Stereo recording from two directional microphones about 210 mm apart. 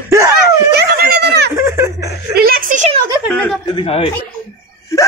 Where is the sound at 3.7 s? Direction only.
25° left (ahead or behind).